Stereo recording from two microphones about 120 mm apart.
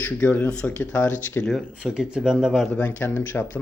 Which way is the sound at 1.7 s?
10° right (ahead or behind).